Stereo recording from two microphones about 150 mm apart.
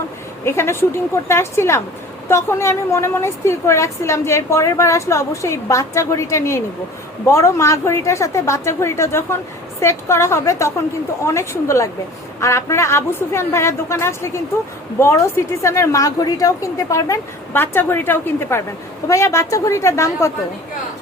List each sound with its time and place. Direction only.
0.4 s a woman's voice: 15° left (ahead or behind)